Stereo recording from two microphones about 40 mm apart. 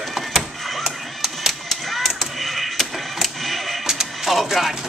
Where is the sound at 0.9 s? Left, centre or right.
Centre.